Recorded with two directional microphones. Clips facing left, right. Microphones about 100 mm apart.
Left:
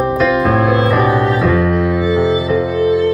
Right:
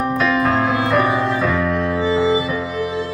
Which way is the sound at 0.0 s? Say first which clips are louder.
Left 4 dB; 5° left (ahead or behind).